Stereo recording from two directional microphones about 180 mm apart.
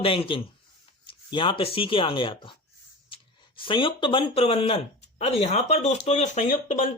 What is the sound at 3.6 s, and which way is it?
Speech, 30° left (ahead or behind).